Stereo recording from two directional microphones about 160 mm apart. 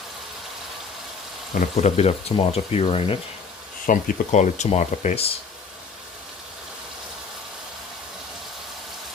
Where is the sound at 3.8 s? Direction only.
60° left (ahead or behind); by 5.3 s 40° left (ahead or behind).